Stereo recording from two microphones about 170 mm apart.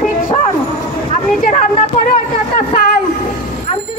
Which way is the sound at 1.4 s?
45° left (ahead or behind).